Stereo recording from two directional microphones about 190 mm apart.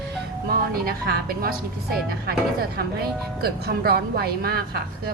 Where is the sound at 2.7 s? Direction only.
55° right (ahead or behind).